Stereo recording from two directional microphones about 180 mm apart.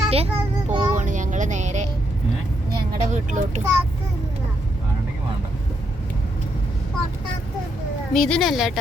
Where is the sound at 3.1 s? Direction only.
40° right (ahead or behind).